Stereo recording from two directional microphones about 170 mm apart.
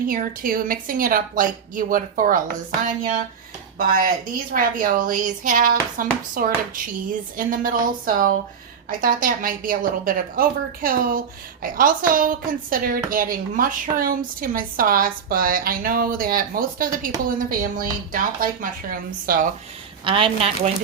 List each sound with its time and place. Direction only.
0.0 s speech: 55° right (ahead or behind)
20.1 s a woman's voice: 30° right (ahead or behind)